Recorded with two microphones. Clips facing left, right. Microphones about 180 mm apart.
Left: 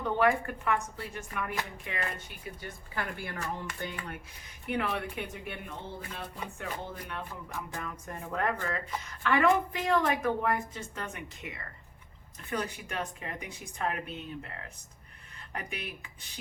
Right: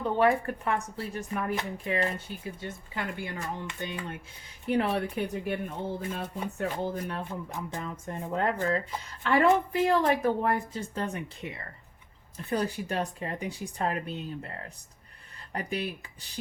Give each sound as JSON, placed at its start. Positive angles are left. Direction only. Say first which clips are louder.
{"t": 0.2, "sound": "speech", "louder": "right 3 dB", "side_deg": -30}
{"t": 4.7, "sound": "a woman's voice", "louder": "right 5 dB", "side_deg": -35}
{"t": 7.5, "sound": "a woman's voice", "louder": "right 3 dB", "side_deg": -20}
{"t": 15.5, "sound": "a woman's voice", "louder": "right 7 dB", "side_deg": -35}